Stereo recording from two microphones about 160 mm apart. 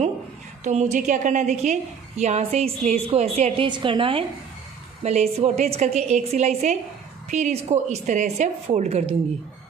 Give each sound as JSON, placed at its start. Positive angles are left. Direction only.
{"t": 0.7, "sound": "a woman's voice", "side_deg": -45}